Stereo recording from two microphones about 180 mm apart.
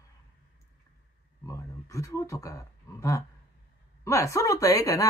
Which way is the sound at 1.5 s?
15° left (ahead or behind).